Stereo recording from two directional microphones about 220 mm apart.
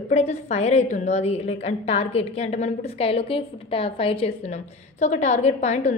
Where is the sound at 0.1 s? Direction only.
30° left (ahead or behind).